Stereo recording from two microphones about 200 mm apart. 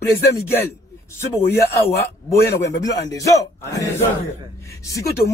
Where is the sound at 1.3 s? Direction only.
10° left (ahead or behind).